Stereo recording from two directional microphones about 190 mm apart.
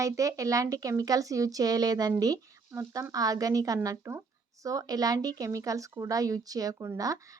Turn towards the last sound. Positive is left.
turn(degrees=-20)  # may be behind; listen again after turning